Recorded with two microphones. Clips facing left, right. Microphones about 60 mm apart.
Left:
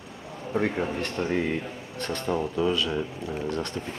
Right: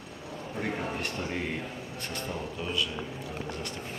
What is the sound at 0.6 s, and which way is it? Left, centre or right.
Speech, left.